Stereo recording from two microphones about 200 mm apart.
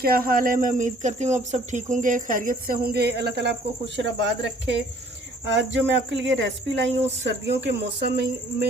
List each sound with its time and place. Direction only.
0.0 s speech: 45° right (ahead or behind)
5.7 s speech: 65° right (ahead or behind)